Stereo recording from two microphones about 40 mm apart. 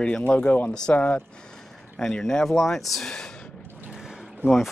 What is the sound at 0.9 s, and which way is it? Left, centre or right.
Speech, left.